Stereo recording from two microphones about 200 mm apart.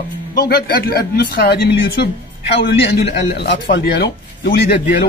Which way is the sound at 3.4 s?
60° left (ahead or behind).